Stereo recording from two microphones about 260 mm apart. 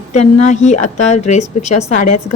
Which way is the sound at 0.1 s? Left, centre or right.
Left.